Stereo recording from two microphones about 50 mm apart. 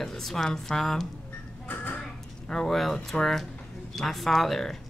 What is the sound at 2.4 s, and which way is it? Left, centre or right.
Speech, centre.